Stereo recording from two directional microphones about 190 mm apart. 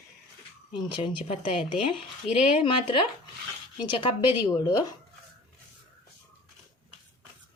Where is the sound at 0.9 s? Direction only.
25° left (ahead or behind).